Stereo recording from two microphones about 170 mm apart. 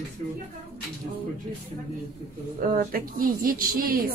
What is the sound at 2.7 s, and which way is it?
A woman's voice, 55° right (ahead or behind).